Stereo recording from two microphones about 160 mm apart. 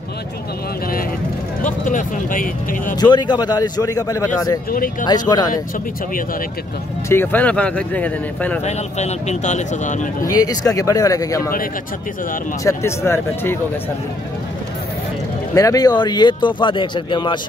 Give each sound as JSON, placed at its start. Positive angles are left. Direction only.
{"t": 1.6, "sound": "speech", "side_deg": 55}
{"t": 3.0, "sound": "speech", "side_deg": 30}
{"t": 4.6, "sound": "speech", "side_deg": 60}
{"t": 5.0, "sound": "speech", "side_deg": 25}
{"t": 7.1, "sound": "speech", "side_deg": 10}
{"t": 8.6, "sound": "speech", "side_deg": 45}
{"t": 10.2, "sound": "speech", "side_deg": 25}
{"t": 12.6, "sound": "speech", "side_deg": 15}
{"t": 15.5, "sound": "speech", "side_deg": 20}